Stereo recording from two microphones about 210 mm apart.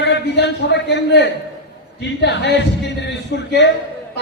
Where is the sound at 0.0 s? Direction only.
55° left (ahead or behind).